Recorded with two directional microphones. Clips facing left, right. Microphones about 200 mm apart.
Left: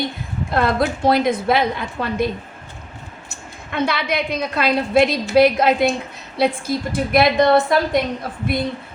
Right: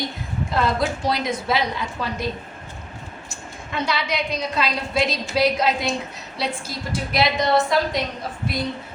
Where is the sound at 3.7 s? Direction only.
55° left (ahead or behind).